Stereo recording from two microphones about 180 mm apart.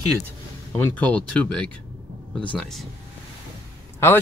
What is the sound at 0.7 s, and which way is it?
Speech, 10° left (ahead or behind).